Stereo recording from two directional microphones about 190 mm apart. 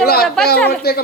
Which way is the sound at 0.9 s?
55° left (ahead or behind).